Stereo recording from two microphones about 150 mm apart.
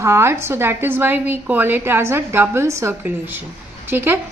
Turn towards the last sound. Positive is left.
turn(degrees=-15)  # may be behind; listen again after turning